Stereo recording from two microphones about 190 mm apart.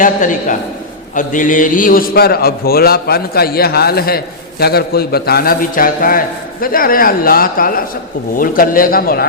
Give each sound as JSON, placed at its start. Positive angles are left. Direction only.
{"t": 0.0, "sound": "a man's voice", "side_deg": 40}